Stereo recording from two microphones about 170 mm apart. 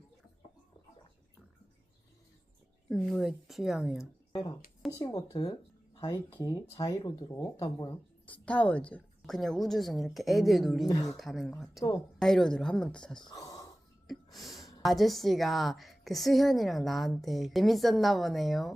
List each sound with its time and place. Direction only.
2.9 s a woman's voice: centre (ahead or behind)
4.3 s speech: 25° left (ahead or behind)
8.3 s a woman's voice: 10° left (ahead or behind)
10.8 s speech: 20° left (ahead or behind)
11.2 s a woman's voice: centre (ahead or behind)
13.2 s speech: 20° left (ahead or behind)
14.1 s a woman's voice: centre (ahead or behind)